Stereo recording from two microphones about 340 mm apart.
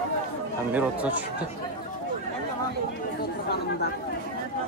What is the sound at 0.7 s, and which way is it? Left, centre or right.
Speech, centre.